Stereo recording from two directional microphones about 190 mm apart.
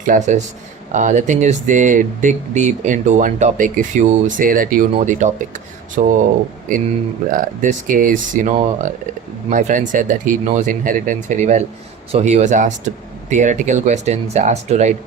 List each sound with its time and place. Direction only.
0.0 s speech: 40° right (ahead or behind)
7.3 s speech: 45° right (ahead or behind)